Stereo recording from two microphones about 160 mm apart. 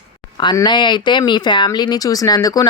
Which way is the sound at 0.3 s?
25° left (ahead or behind).